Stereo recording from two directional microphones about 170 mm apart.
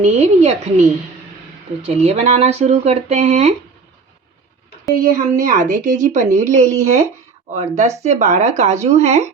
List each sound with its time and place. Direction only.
0.0 s speech: 40° right (ahead or behind)
5.0 s speech: 55° right (ahead or behind)
6.4 s a woman's voice: 15° right (ahead or behind)
7.5 s speech: 40° right (ahead or behind)